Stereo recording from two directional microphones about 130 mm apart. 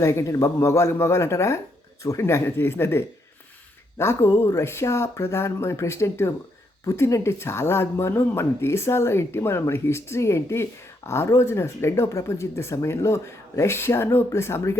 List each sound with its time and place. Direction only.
0.0 s speech: 20° left (ahead or behind)